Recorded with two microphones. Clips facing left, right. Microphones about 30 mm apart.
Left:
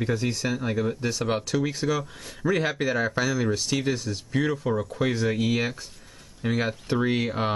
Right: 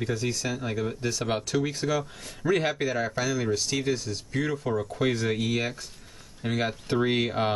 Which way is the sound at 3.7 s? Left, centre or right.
Centre.